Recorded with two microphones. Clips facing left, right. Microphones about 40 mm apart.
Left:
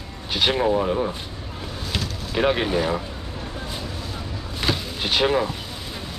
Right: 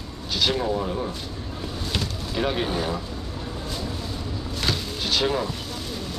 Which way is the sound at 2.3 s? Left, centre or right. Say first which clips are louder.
Left 5 dB; left.